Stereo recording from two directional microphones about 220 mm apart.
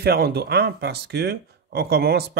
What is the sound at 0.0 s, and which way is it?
Speech, 45° right (ahead or behind).